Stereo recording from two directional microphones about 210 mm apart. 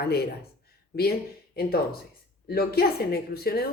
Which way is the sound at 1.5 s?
45° left (ahead or behind).